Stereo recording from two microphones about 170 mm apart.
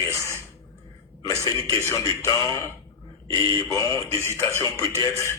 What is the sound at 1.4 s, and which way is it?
A man's voice, 20° left (ahead or behind).